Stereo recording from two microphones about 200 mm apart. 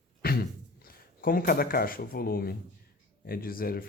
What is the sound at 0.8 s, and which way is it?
Speech, 45° left (ahead or behind).